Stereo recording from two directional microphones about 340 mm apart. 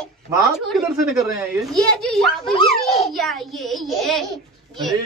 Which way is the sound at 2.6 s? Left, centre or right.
Centre.